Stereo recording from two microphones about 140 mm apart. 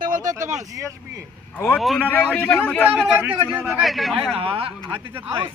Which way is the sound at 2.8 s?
15° right (ahead or behind).